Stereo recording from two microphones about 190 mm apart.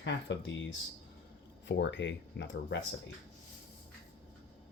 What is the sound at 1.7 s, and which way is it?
Speech, 70° left (ahead or behind).